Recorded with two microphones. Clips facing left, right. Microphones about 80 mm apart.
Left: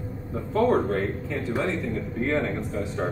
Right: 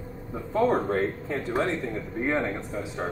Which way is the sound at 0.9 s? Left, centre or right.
Right.